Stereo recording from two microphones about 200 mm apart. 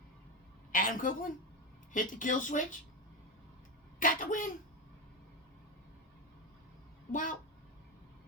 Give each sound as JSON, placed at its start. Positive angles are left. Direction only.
{"t": 0.7, "sound": "a woman's voice", "side_deg": 45}
{"t": 4.0, "sound": "speech", "side_deg": 40}
{"t": 7.1, "sound": "speech", "side_deg": 40}